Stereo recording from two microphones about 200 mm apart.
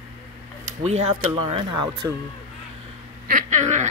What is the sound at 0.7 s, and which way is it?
Speech, 35° right (ahead or behind).